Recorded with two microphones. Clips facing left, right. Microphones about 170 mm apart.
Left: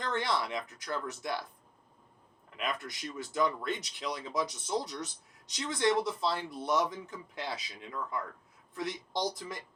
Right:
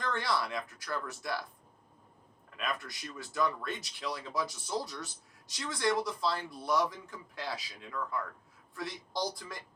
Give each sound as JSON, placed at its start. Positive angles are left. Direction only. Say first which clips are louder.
{"t": 0.0, "sound": "speech", "louder": "left 1 dB", "side_deg": 20}
{"t": 2.6, "sound": "speech", "louder": "left 1 dB", "side_deg": 20}